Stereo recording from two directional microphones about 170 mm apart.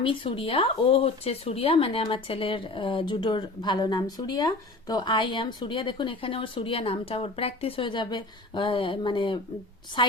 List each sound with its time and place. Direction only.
0.0 s a woman's voice: 30° left (ahead or behind)